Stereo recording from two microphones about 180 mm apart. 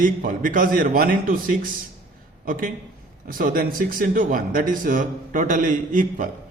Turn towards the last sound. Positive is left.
turn(degrees=-45)  # may be behind; listen again after turning